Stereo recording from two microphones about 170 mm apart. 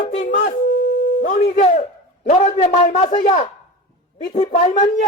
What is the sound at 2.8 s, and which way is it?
Speech, 40° left (ahead or behind).